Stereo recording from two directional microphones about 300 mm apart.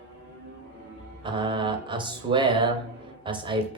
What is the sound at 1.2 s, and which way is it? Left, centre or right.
Speech, centre.